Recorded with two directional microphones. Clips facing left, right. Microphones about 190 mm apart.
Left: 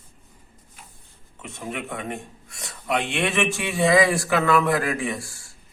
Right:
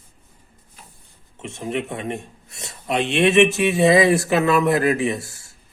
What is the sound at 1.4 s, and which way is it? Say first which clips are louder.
Speech: right 6 dB; 25° right (ahead or behind).